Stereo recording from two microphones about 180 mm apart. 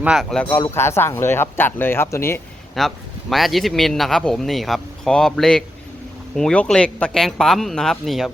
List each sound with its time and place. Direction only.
0.0 s speech: centre (ahead or behind); by 2.4 s 15° left (ahead or behind)
2.7 s speech: centre (ahead or behind)